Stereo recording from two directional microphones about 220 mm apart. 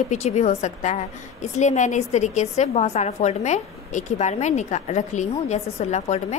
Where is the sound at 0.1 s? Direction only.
30° left (ahead or behind).